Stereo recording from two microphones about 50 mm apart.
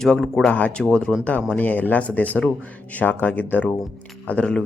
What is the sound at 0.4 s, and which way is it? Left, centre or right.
Speech, left.